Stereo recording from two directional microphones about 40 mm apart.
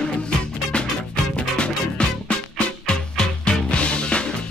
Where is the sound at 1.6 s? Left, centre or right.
Left.